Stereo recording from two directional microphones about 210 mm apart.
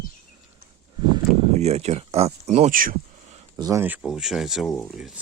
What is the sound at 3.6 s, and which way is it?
Speech, 15° right (ahead or behind).